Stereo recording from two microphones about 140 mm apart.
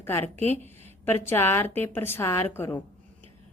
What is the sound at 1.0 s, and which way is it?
A woman's voice, 15° left (ahead or behind).